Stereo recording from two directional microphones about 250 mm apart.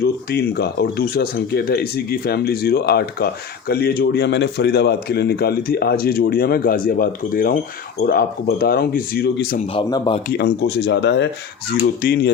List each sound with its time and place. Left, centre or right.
0.0 s speech: left
9.7 s a man's voice: left
10.3 s speech: left